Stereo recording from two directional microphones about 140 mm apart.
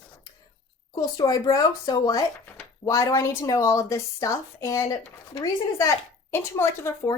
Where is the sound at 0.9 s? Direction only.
25° left (ahead or behind).